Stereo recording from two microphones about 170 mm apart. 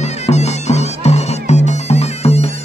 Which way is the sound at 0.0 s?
40° left (ahead or behind).